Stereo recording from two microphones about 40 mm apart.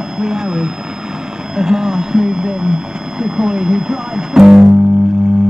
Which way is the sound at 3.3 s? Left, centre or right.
Centre.